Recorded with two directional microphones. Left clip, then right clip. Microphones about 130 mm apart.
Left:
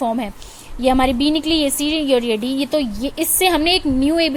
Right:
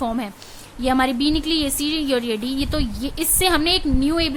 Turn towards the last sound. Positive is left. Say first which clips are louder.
# left 4 dB
turn(degrees=15)  # may be behind; listen again after turning